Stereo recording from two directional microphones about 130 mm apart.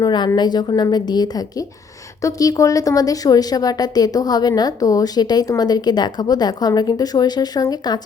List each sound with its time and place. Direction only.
0.0 s a woman's voice: 35° left (ahead or behind)